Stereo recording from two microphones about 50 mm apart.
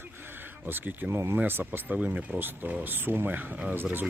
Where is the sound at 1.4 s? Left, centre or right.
Right.